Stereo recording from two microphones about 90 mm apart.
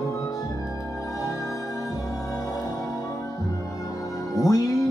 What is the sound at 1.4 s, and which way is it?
Music, 35° left (ahead or behind).